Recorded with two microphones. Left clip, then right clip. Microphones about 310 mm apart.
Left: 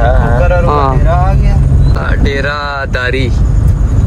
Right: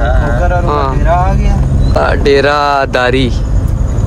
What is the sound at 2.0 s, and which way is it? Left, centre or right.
Speech, centre.